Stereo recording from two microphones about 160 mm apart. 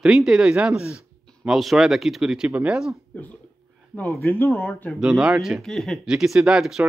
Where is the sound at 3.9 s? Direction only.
10° left (ahead or behind).